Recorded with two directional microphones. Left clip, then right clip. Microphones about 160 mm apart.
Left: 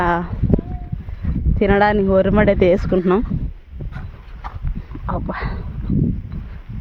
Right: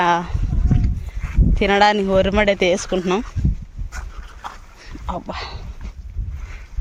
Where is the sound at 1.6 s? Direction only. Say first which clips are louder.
Even; 30° left (ahead or behind).